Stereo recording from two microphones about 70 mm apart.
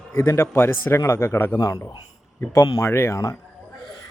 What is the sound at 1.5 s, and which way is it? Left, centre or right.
Speech, left.